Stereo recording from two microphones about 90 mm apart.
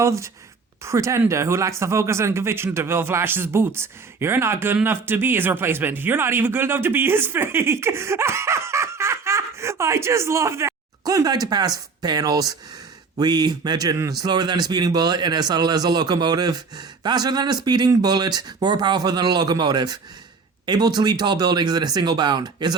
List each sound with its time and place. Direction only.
0.0 s speech: 35° right (ahead or behind)
11.0 s a man's voice: 40° right (ahead or behind)